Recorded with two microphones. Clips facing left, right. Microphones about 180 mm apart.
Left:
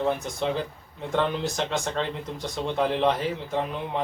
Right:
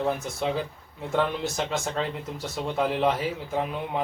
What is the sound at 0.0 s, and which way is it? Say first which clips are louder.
Speech: left 1 dB; centre (ahead or behind).